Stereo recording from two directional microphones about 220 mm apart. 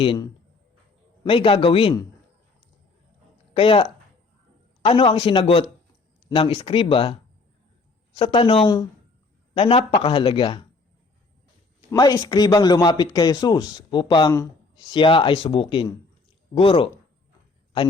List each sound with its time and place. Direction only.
0.0 s speech: 20° left (ahead or behind)
3.5 s speech: 25° left (ahead or behind)
4.9 s speech: 25° left (ahead or behind)
11.9 s speech: 15° left (ahead or behind)